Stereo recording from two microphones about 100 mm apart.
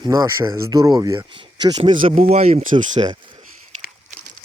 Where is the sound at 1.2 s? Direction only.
50° right (ahead or behind).